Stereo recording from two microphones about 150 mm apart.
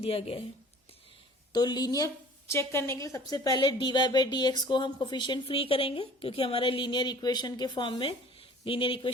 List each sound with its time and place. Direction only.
0.0 s a woman's voice: 40° left (ahead or behind)
1.5 s a woman's voice: 25° left (ahead or behind)